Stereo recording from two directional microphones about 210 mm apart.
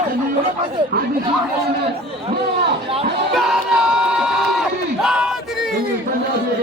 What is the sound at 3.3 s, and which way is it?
Crowd, centre (ahead or behind).